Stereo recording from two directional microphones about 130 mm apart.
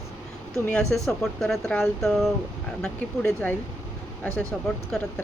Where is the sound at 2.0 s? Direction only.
Centre (ahead or behind).